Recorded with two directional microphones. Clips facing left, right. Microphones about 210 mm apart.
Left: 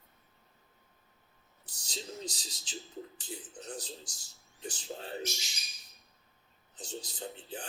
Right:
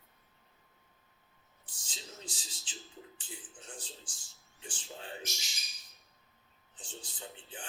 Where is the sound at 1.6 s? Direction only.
40° left (ahead or behind).